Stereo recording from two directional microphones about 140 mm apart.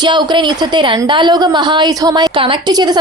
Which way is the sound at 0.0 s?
30° right (ahead or behind).